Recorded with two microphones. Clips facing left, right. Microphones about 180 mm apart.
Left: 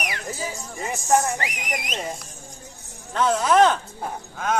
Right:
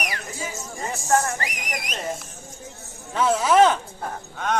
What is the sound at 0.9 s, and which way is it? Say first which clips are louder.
Speech: left 1 dB; 15° left (ahead or behind).